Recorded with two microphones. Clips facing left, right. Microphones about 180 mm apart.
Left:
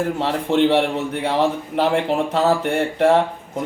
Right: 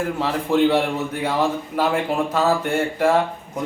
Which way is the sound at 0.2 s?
25° left (ahead or behind).